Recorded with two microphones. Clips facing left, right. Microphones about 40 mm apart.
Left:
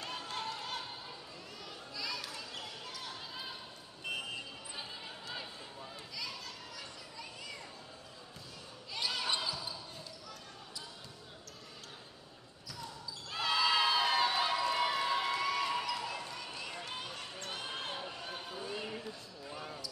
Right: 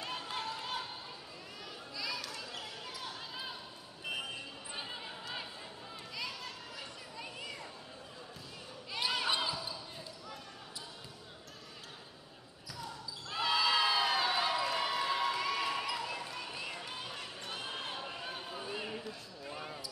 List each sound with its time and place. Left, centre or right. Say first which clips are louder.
0.0 s run: right 1 dB; centre
2.0 s basketball bounce: right 1 dB; centre
4.7 s a sound: right 3 dB; centre
6.1 s children playing: right 2 dB; right
8.9 s basketball bounce: right 2 dB; centre
13.3 s cheering: even; centre
17.0 s a sound: even; centre
18.0 s a sound: right 1 dB; centre
19.4 s basketball bounce: right 1 dB; centre